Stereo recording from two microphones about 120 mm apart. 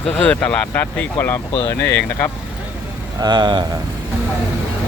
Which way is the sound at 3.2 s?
35° right (ahead or behind).